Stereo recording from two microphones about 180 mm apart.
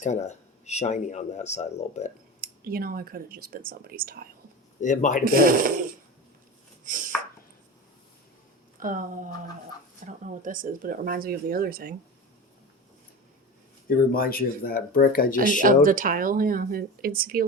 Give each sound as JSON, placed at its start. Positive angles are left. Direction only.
{"t": 0.0, "sound": "speech", "side_deg": 40}
{"t": 2.6, "sound": "speech", "side_deg": -55}
{"t": 4.8, "sound": "speech", "side_deg": 45}
{"t": 5.2, "sound": "speech", "side_deg": -55}
{"t": 6.8, "sound": "chopping", "side_deg": -45}
{"t": 8.8, "sound": "speech", "side_deg": -50}
{"t": 10.1, "sound": "speech", "side_deg": -50}
{"t": 13.8, "sound": "speech", "side_deg": 55}
{"t": 15.5, "sound": "speech", "side_deg": -50}